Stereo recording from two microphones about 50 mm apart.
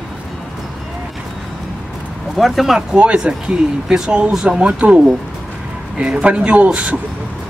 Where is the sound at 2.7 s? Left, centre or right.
Right.